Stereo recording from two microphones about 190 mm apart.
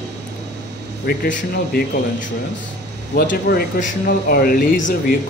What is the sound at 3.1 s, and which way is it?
Speech, 50° left (ahead or behind).